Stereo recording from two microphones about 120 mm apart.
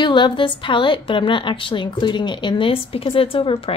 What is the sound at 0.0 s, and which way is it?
A woman's voice, 40° left (ahead or behind).